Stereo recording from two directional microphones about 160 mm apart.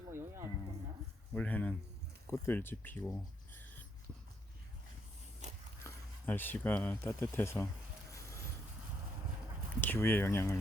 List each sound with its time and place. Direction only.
0.1 s a sound: 15° right (ahead or behind)
1.3 s speech: 10° left (ahead or behind)
5.8 s speech: 10° left (ahead or behind)
9.8 s speech: 10° left (ahead or behind)